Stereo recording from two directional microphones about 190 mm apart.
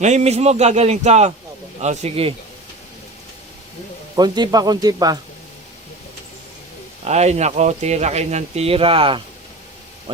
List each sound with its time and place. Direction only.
0.0 s speech: 35° right (ahead or behind)
4.1 s speech: 20° right (ahead or behind)
7.0 s speech: 35° right (ahead or behind)